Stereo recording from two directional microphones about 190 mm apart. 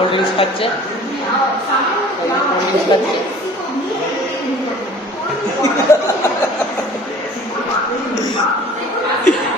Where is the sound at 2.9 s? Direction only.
20° left (ahead or behind).